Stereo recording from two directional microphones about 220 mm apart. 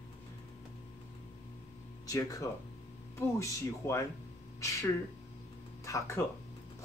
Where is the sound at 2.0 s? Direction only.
15° left (ahead or behind).